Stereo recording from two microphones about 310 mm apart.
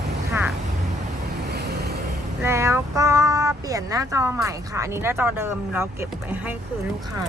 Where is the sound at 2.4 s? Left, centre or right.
Centre.